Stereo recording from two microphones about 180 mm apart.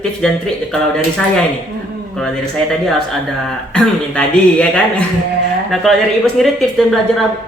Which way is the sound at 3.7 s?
5° left (ahead or behind).